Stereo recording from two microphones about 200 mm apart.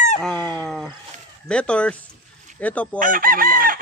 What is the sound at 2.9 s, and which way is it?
Chicken, 45° right (ahead or behind).